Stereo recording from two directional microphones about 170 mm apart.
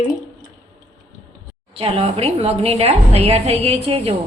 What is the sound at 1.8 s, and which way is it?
A woman's voice, 35° right (ahead or behind).